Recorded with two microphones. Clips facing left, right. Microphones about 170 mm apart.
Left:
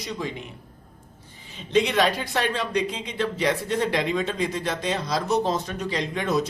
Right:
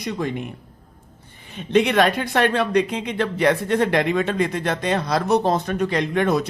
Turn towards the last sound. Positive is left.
turn(degrees=-60)  # may be behind; listen again after turning